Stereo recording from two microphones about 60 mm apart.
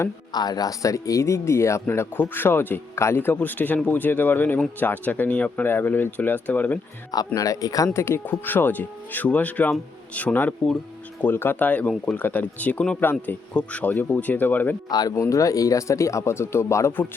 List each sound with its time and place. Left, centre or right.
0.4 s speech: left
1.9 s speech: left
5.6 s speech: left
7.3 s speech: left
7.9 s speech: left
8.3 s speech: left; by 10.8 s centre
11.2 s speech: left
13.0 s speech: left
13.5 s speech: left
14.8 s speech: left
15.2 s speech: left